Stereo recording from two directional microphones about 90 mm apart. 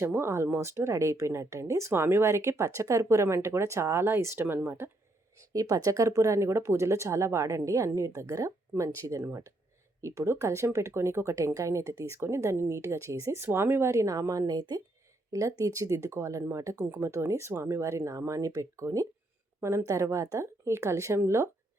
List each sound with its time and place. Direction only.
0.0 s speech: 30° right (ahead or behind)
5.5 s speech: 40° right (ahead or behind)